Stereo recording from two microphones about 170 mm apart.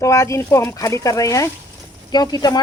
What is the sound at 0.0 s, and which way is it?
Speech, 20° left (ahead or behind).